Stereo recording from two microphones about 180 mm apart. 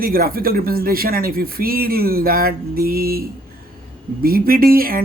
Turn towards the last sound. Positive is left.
turn(degrees=-55)  # may be behind; listen again after turning